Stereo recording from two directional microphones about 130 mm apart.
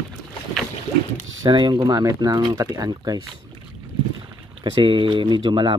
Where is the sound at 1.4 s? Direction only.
35° right (ahead or behind).